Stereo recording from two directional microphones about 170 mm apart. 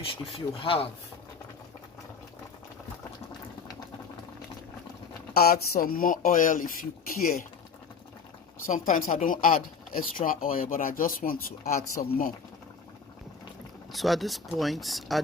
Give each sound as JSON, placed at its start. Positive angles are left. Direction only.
{"t": 0.6, "sound": "speech", "side_deg": 35}
{"t": 5.3, "sound": "a woman's voice", "side_deg": 65}
{"t": 8.6, "sound": "a woman's voice", "side_deg": 50}
{"t": 13.9, "sound": "speech", "side_deg": 0}